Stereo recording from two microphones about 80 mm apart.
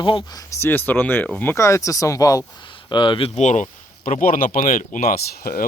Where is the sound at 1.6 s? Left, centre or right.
Left.